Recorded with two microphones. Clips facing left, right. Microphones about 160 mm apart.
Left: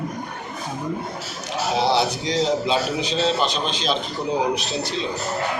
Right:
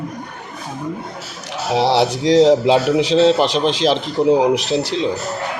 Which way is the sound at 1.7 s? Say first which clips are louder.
Right 5 dB; 90° right.